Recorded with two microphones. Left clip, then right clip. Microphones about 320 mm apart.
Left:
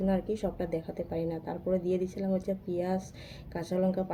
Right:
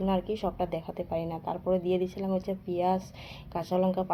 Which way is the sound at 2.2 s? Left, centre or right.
Centre.